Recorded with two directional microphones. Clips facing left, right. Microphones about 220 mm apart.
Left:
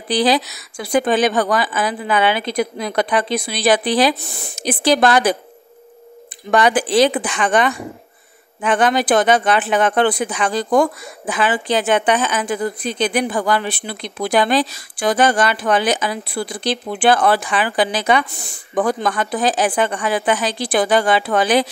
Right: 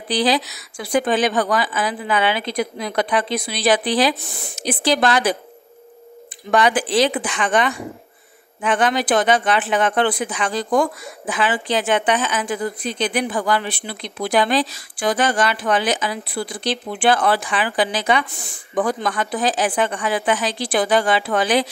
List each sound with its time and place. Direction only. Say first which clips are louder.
0.1 s speech: left 3 dB; 50° left (ahead or behind)
6.5 s speech: left 2 dB; 45° left (ahead or behind)